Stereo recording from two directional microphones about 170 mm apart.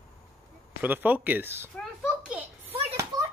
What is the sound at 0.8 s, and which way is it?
Speech, 10° right (ahead or behind).